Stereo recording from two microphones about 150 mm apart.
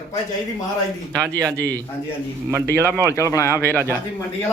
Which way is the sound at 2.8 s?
20° right (ahead or behind).